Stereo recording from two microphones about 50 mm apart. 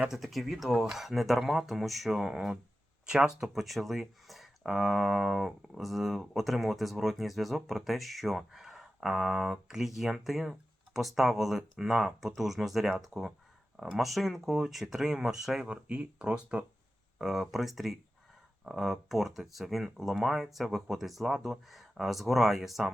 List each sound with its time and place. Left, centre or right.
0.1 s speech: centre
15.6 s speech: right
17.2 s speech: centre